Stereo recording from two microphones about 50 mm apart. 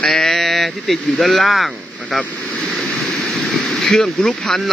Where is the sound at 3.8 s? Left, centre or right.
Centre.